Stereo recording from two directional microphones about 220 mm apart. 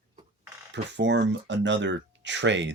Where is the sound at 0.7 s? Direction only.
50° right (ahead or behind).